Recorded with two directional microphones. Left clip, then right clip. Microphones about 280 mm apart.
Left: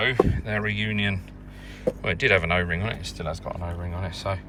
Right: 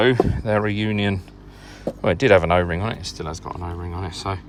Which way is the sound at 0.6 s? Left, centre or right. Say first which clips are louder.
Right 1 dB; right.